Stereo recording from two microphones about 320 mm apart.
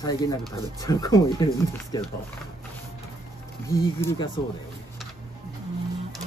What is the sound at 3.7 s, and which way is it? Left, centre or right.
Speech, centre.